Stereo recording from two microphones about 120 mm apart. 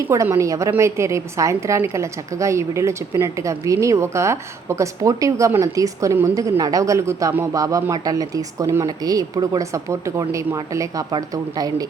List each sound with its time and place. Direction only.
0.1 s a woman's voice: 25° right (ahead or behind)